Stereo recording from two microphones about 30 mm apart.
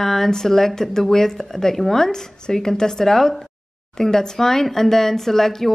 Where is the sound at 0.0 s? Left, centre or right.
Centre.